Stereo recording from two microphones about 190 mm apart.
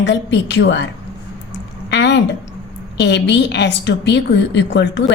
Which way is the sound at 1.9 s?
65° left (ahead or behind).